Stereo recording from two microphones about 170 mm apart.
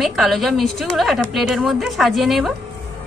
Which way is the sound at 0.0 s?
Centre (ahead or behind).